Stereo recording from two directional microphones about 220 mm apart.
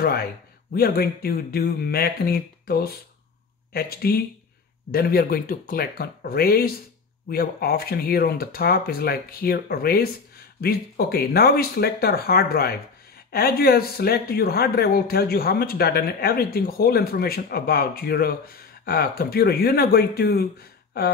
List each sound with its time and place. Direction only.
0.7 s speech: 45° left (ahead or behind)